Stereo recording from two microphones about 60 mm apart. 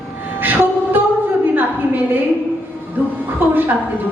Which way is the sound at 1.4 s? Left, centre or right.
Right.